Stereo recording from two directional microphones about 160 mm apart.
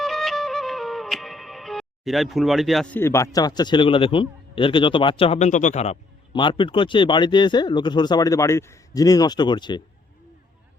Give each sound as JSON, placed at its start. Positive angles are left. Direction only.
{"t": 0.0, "sound": "music", "side_deg": 0}